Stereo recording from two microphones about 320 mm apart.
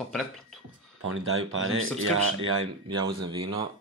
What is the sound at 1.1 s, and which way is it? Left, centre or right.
Speech, right.